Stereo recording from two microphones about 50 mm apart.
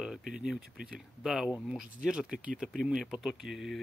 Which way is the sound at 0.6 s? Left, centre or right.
Right.